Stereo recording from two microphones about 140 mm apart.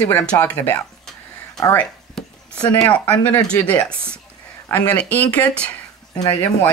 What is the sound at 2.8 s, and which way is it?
Speech, 10° left (ahead or behind).